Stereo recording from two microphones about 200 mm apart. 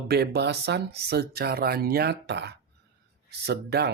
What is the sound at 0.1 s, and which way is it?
Speech, 55° right (ahead or behind).